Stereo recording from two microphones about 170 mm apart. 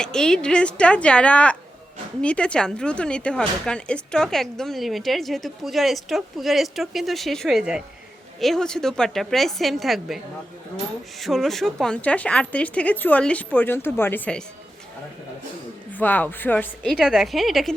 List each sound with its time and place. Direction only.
0.0 s a woman's voice: 5° left (ahead or behind)
11.2 s speech: centre (ahead or behind)
15.9 s a woman's voice: 10° left (ahead or behind)